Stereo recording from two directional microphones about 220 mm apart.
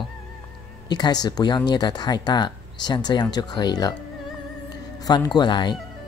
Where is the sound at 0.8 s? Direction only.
20° left (ahead or behind).